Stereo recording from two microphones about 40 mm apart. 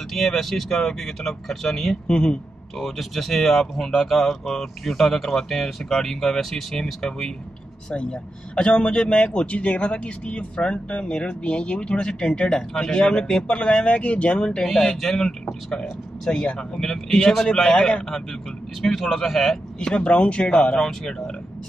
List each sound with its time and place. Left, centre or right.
0.1 s speech: centre
2.0 s a man's voice: left
2.8 s a man's voice: centre; by 14.7 s left
14.7 s a man's voice: centre
19.8 s a man's voice: left
20.7 s speech: centre